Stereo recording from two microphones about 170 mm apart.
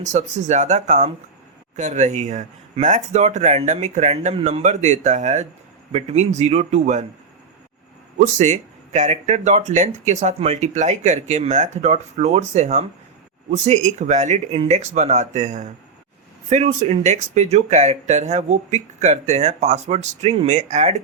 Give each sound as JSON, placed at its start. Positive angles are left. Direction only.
{"t": 0.0, "sound": "a man's voice", "side_deg": -45}
{"t": 8.2, "sound": "speech", "side_deg": -45}